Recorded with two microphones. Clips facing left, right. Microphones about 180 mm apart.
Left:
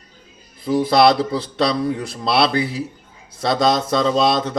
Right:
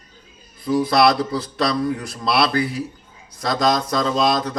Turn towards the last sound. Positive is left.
turn(degrees=25)  # may be behind; listen again after turning